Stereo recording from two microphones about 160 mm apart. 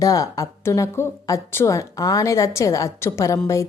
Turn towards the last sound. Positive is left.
turn(degrees=20)  # may be behind; listen again after turning